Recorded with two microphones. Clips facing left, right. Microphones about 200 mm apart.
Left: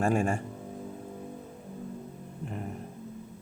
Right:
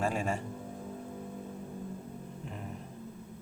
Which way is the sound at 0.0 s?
50° left (ahead or behind).